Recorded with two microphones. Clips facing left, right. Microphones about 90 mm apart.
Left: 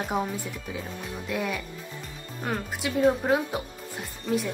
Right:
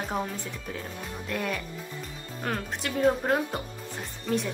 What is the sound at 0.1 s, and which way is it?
Speech, 5° left (ahead or behind).